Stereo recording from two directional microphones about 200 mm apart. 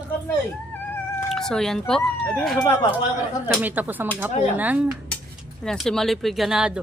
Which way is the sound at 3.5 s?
10° right (ahead or behind).